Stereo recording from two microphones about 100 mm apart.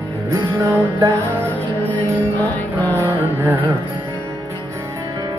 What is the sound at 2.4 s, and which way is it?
Music, 15° left (ahead or behind).